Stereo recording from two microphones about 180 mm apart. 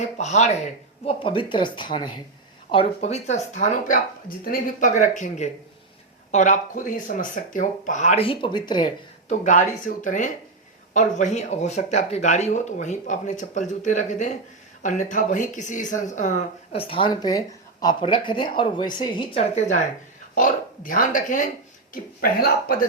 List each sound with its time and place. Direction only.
0.2 s speech: 40° left (ahead or behind); by 8.9 s 25° left (ahead or behind)
9.4 s speech: 45° left (ahead or behind)
16.7 s a woman's voice: 30° left (ahead or behind); by 21.4 s 45° left (ahead or behind)
21.9 s speech: 55° left (ahead or behind)